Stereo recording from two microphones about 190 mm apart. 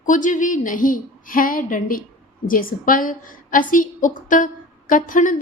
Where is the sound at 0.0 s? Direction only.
45° left (ahead or behind).